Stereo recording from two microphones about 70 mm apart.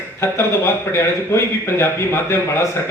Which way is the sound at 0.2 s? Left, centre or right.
Left.